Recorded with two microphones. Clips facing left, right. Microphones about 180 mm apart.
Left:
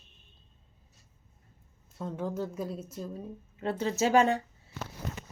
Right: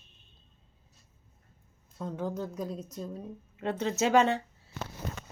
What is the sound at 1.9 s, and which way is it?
A woman's voice, centre (ahead or behind).